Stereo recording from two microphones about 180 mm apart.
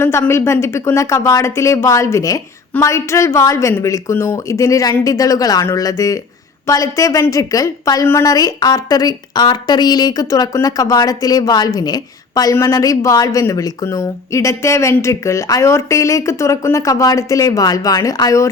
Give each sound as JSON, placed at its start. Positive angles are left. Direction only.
{"t": 0.0, "sound": "a woman's voice", "side_deg": 15}